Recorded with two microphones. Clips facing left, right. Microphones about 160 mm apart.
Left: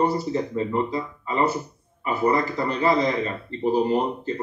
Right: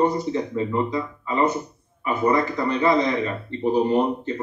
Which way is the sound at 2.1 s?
35° left (ahead or behind).